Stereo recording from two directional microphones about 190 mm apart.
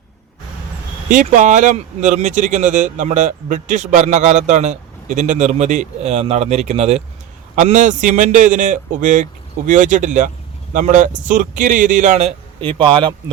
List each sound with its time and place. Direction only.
1.1 s speech: 45° right (ahead or behind)
12.5 s a man's voice: 25° right (ahead or behind)